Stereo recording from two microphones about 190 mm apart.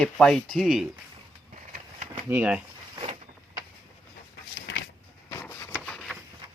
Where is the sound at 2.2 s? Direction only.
10° right (ahead or behind).